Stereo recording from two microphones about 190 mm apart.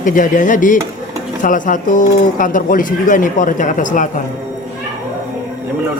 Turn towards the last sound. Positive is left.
turn(degrees=40)  # may be behind; listen again after turning